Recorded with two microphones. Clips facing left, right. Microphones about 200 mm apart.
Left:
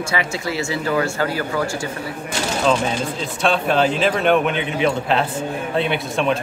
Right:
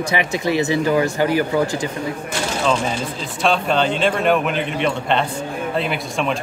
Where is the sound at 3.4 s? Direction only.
Centre (ahead or behind).